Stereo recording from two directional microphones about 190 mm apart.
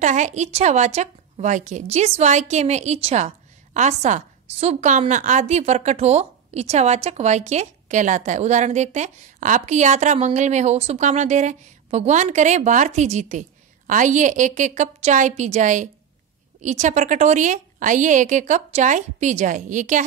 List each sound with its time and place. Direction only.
0.0 s a woman's voice: 40° right (ahead or behind)